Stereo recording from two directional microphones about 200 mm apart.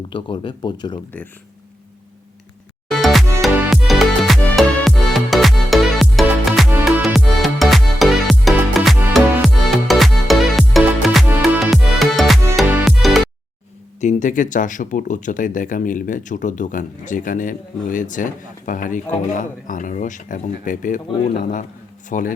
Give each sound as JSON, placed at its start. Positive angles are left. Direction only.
{"t": 0.1, "sound": "speech", "side_deg": 25}
{"t": 2.9, "sound": "music", "side_deg": 0}
{"t": 14.0, "sound": "a man's voice", "side_deg": 40}